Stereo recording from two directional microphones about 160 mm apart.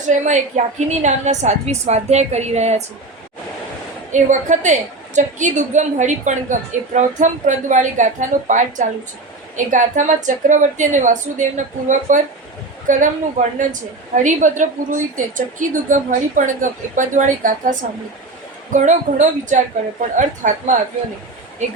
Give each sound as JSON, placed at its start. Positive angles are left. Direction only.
{"t": 0.0, "sound": "a woman's voice", "side_deg": -50}
{"t": 4.1, "sound": "a woman's voice", "side_deg": -50}